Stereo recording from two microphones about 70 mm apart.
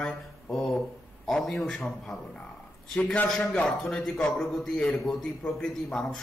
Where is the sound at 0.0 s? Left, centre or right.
Centre.